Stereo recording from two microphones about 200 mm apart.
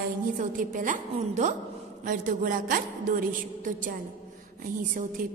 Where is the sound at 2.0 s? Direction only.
45° right (ahead or behind).